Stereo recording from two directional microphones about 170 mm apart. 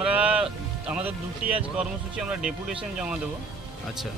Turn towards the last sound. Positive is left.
turn(degrees=-5)  # may be behind; listen again after turning